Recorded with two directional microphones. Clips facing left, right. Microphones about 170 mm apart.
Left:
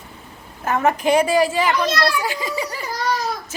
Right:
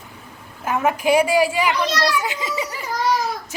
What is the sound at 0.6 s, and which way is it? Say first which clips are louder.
A woman's voice: left 1 dB; 10° right (ahead or behind).